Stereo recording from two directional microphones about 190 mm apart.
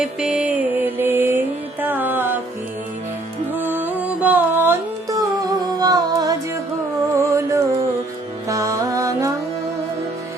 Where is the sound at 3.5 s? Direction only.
10° right (ahead or behind).